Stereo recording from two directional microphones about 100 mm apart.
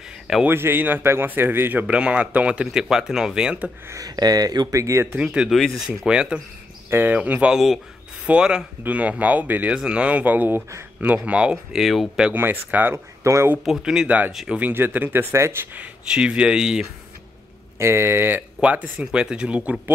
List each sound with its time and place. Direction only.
0.5 s speech: 20° right (ahead or behind)
3.8 s speech: 35° right (ahead or behind)
5.1 s speech: 10° right (ahead or behind)
5.6 s speech: 5° left (ahead or behind)
6.0 s speech: 10° right (ahead or behind)
12.3 s speech: 20° right (ahead or behind)
13.7 s speech: 5° right (ahead or behind)
14.0 s speech: 15° right (ahead or behind)
14.6 s speech: 20° right (ahead or behind)
15.8 s speech: 10° right (ahead or behind)
17.7 s speech: 25° right (ahead or behind); by 19.8 s 10° right (ahead or behind)